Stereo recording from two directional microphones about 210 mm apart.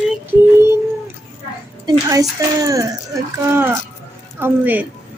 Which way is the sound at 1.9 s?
15° right (ahead or behind).